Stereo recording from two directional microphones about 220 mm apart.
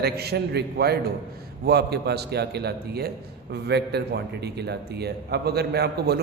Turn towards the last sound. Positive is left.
turn(degrees=-45)  # may be behind; listen again after turning